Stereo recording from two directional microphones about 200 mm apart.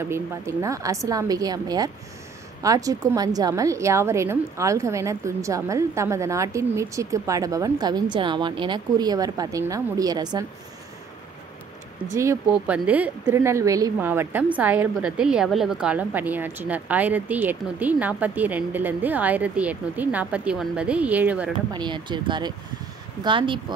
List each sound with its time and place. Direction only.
0.0 s a woman's voice: 15° right (ahead or behind)
12.1 s a woman's voice: 15° right (ahead or behind)
21.7 s speech: 25° right (ahead or behind)